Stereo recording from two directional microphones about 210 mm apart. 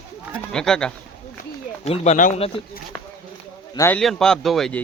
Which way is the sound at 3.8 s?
10° left (ahead or behind).